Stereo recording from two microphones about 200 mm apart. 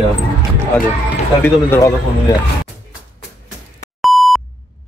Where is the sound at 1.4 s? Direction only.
15° left (ahead or behind).